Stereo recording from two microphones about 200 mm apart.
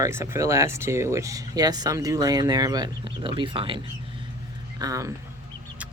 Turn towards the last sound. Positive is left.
turn(degrees=-15)  # may be behind; listen again after turning